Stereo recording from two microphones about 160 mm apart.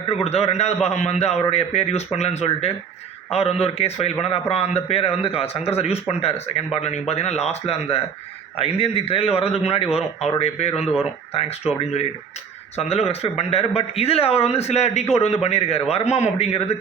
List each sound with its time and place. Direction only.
0.1 s speech: 40° left (ahead or behind)